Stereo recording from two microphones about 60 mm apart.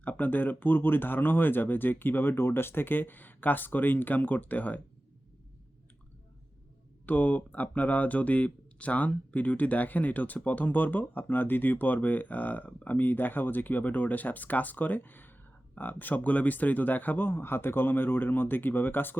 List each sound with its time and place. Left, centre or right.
0.0 s speech: left
7.0 s speech: left